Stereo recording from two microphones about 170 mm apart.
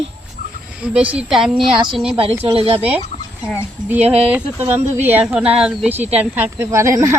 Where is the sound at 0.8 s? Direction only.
5° right (ahead or behind).